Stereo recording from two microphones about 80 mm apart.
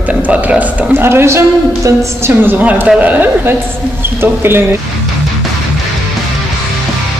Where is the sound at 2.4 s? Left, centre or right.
Right.